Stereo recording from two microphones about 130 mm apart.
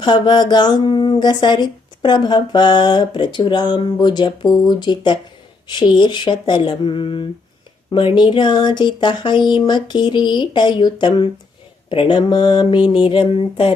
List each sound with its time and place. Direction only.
0.0 s speech: 35° left (ahead or behind)